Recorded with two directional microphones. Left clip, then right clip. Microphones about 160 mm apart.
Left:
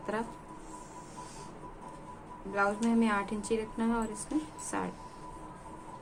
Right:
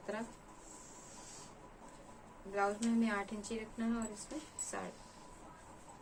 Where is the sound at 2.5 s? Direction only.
30° left (ahead or behind).